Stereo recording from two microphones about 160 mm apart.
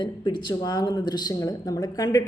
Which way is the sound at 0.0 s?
30° left (ahead or behind).